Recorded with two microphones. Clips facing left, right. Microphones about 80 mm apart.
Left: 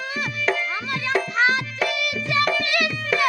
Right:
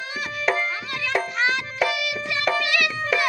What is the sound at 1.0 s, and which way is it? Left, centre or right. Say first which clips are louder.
Music: left 3 dB; left.